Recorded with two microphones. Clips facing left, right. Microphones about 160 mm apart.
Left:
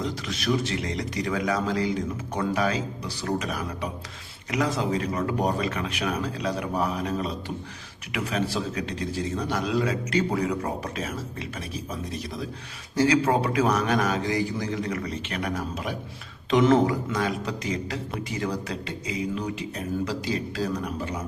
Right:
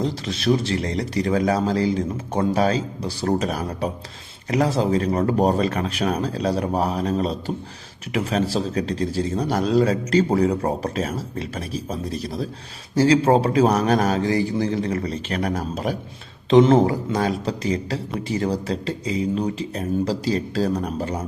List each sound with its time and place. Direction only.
0.0 s speech: 30° right (ahead or behind)